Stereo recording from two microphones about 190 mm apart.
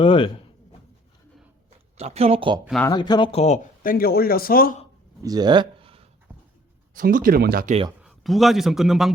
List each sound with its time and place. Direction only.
0.0 s speech: 25° left (ahead or behind)
2.0 s speech: 35° right (ahead or behind)
2.9 s speech: 25° left (ahead or behind)
3.4 s speech: 40° left (ahead or behind)
5.2 s speech: 20° right (ahead or behind)
6.9 s speech: 45° right (ahead or behind)
8.0 s a man's voice: centre (ahead or behind)